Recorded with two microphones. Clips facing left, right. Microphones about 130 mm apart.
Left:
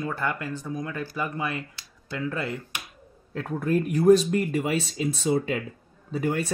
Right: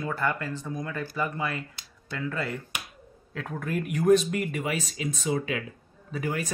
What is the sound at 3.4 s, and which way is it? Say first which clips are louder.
Speech: left 6 dB; 30° left (ahead or behind).